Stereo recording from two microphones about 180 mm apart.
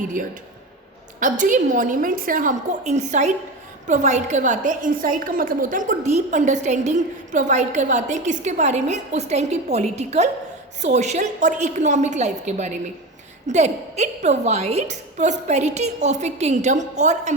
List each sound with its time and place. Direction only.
0.0 s a woman's voice: 45° right (ahead or behind)